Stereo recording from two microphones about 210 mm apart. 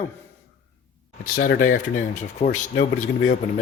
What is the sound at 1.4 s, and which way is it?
Speech, 40° left (ahead or behind).